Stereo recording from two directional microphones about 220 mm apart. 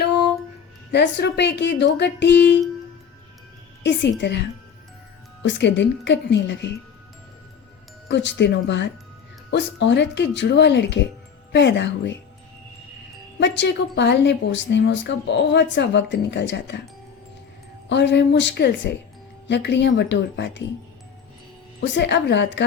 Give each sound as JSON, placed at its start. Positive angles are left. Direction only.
{"t": 0.9, "sound": "a woman's voice", "side_deg": 50}
{"t": 3.8, "sound": "a woman's voice", "side_deg": 50}
{"t": 8.0, "sound": "a woman's voice", "side_deg": 55}
{"t": 13.4, "sound": "a woman's voice", "side_deg": 55}
{"t": 17.8, "sound": "a woman's voice", "side_deg": 50}
{"t": 21.8, "sound": "a woman's voice", "side_deg": 50}